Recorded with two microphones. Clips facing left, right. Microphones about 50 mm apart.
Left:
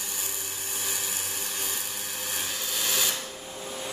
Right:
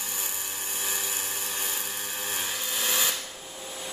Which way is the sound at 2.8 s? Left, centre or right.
Right.